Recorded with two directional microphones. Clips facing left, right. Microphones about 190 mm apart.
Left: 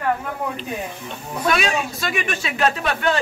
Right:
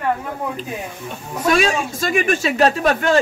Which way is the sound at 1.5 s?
40° right (ahead or behind).